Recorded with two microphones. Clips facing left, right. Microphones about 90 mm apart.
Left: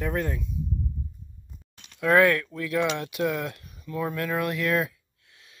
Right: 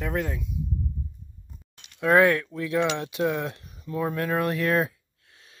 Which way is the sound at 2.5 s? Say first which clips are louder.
Right 1 dB; 25° right (ahead or behind).